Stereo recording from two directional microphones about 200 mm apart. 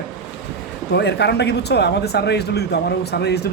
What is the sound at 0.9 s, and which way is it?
A man's voice, 55° left (ahead or behind).